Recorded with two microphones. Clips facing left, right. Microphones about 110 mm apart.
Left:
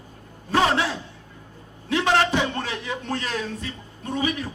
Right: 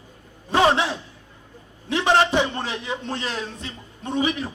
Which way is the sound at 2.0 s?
20° right (ahead or behind).